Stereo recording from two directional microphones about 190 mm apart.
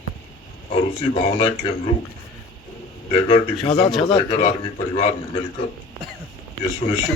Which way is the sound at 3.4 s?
20° left (ahead or behind).